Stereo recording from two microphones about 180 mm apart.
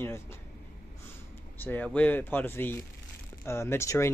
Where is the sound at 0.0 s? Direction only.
15° left (ahead or behind).